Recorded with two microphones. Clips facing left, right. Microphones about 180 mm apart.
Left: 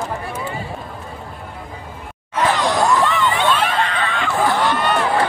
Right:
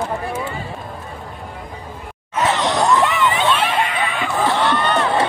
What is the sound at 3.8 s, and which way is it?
Screaming, 10° right (ahead or behind).